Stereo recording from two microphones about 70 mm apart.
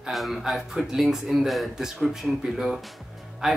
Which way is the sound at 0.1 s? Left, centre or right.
Centre.